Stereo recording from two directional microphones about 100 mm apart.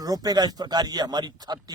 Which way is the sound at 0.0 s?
40° right (ahead or behind).